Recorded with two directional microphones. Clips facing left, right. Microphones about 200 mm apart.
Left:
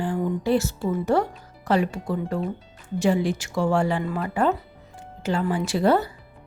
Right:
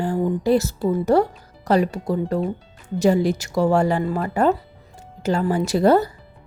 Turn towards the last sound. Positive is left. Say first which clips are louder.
# right 4 dB
turn(degrees=-40)  # may be behind; listen again after turning